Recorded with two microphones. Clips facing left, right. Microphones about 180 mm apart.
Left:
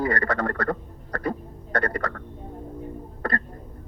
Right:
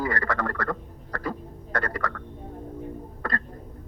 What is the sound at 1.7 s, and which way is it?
Speech, 65° left (ahead or behind).